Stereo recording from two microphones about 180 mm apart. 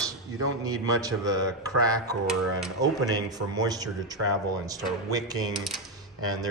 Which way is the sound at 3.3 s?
20° right (ahead or behind).